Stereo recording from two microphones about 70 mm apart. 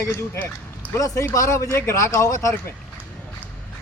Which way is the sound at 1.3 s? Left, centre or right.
Left.